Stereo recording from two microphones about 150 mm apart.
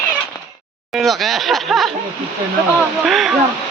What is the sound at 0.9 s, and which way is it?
Speech, centre (ahead or behind).